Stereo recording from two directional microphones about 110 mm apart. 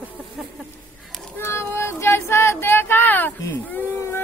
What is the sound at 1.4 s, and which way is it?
Child singing, 25° left (ahead or behind).